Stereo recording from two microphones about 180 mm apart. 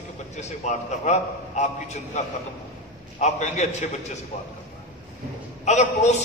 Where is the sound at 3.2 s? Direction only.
40° left (ahead or behind).